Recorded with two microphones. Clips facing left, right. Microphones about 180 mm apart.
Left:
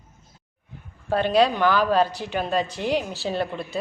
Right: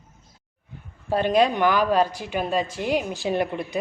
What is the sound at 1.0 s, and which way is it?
A woman's voice, 10° right (ahead or behind).